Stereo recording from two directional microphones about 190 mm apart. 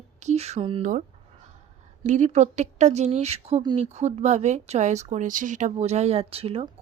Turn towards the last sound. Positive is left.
turn(degrees=-30)  # may be behind; listen again after turning